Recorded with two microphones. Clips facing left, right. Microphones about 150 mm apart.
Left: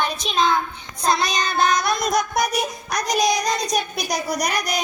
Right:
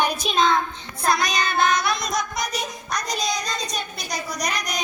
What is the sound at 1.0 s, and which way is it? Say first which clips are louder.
Child singing: left 1 dB; 25° left (ahead or behind).